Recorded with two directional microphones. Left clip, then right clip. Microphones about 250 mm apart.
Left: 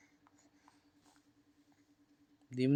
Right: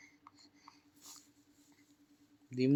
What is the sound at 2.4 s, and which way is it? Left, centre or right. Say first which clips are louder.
Speech: right 1 dB; left.